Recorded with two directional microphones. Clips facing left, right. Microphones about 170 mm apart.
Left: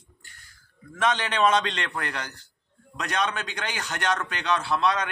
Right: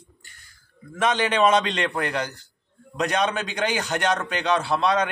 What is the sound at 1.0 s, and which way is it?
A man's voice, 10° right (ahead or behind).